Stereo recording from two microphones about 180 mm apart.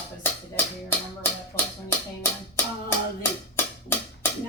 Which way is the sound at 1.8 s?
10° left (ahead or behind).